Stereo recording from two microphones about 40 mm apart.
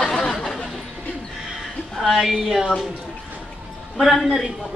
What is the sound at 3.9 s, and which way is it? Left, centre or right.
Speech, centre.